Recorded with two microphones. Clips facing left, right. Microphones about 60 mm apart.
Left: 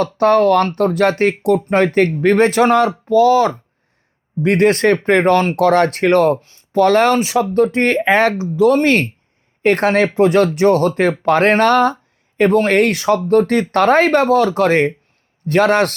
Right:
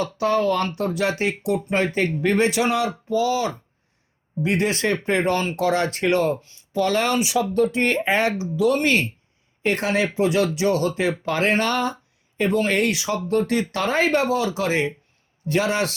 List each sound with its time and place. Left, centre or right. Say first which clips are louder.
0.0 s speech: left 8 dB; left